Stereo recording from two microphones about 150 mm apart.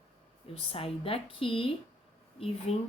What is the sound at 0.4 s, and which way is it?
A woman's voice, 40° left (ahead or behind).